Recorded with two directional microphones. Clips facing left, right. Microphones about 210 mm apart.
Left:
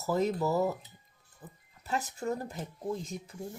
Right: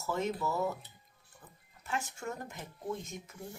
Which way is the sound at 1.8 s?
35° left (ahead or behind).